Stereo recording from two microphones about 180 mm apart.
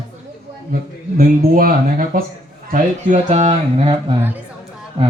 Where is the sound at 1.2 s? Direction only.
55° right (ahead or behind).